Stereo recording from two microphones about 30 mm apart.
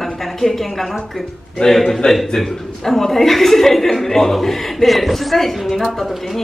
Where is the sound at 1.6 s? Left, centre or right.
Left.